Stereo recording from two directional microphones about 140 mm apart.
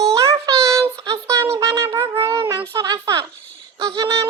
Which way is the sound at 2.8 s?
25° right (ahead or behind).